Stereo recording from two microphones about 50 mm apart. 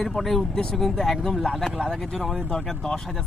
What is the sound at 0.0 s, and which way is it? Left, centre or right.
Speech, centre.